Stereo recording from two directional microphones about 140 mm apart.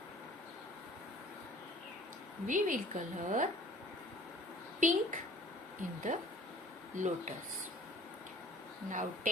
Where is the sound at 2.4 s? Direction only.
65° right (ahead or behind).